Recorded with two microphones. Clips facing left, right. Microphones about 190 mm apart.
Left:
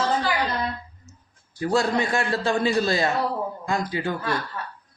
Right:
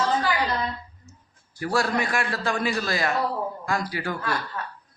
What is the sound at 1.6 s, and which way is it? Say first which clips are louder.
A man's voice: left 3 dB; 20° left (ahead or behind).